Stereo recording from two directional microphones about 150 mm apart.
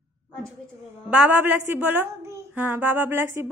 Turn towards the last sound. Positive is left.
turn(degrees=-15)  # may be behind; listen again after turning